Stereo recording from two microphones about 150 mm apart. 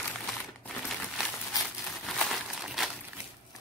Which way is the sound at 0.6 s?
Centre (ahead or behind).